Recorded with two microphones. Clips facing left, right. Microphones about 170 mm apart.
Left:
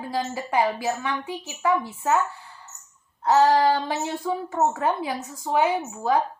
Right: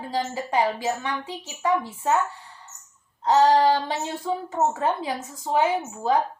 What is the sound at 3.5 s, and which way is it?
A child's voice, 30° right (ahead or behind).